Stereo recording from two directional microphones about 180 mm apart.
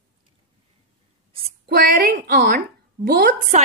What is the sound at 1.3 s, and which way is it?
A woman's voice, 55° right (ahead or behind).